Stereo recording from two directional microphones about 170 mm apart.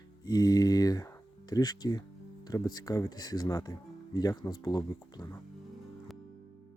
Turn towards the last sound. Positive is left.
turn(degrees=25)  # may be behind; listen again after turning